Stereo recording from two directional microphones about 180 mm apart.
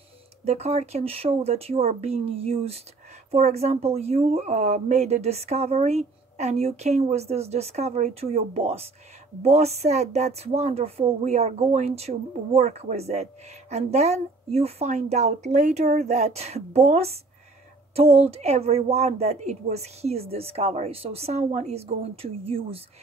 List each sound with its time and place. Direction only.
0.5 s speech: 35° right (ahead or behind)